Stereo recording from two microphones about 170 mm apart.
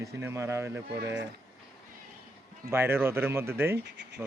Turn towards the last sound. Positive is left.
turn(degrees=-90)